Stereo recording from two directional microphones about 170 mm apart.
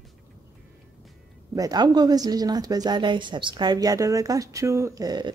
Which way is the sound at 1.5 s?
20° right (ahead or behind).